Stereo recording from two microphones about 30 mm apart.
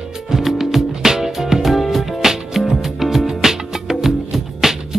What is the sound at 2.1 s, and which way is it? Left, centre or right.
Music, centre.